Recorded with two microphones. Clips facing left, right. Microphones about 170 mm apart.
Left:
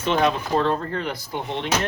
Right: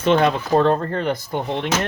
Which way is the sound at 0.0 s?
55° right (ahead or behind).